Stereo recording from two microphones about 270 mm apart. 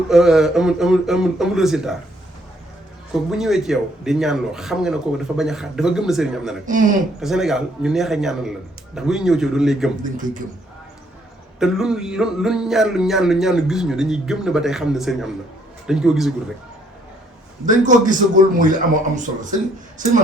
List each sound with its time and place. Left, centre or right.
0.1 s speech: centre
3.1 s speech: centre
6.7 s a man's voice: right
7.2 s speech: centre
10.0 s a man's voice: right
11.6 s speech: centre
17.7 s a man's voice: right